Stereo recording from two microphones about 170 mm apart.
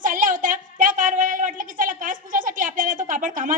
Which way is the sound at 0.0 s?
50° right (ahead or behind).